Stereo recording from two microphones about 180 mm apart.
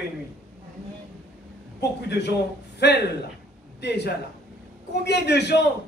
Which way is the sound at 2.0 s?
70° left (ahead or behind).